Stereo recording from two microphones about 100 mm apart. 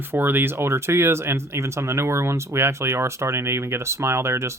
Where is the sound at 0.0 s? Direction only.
20° right (ahead or behind).